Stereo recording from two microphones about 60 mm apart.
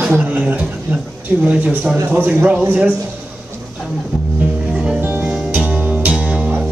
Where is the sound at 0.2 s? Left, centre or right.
Right.